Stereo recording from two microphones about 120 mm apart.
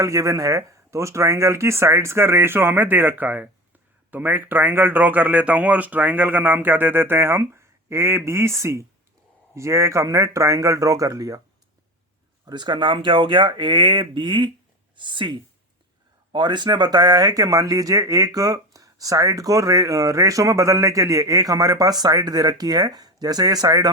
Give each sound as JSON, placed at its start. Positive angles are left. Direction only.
{"t": 0.0, "sound": "speech", "side_deg": -25}
{"t": 12.5, "sound": "speech", "side_deg": -40}